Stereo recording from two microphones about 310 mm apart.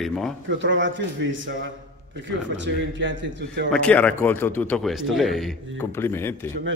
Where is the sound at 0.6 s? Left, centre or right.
Right.